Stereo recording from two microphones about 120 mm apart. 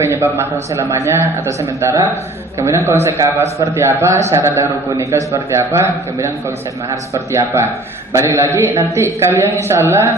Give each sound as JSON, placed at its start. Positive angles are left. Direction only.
{"t": 0.0, "sound": "a man's voice", "side_deg": -20}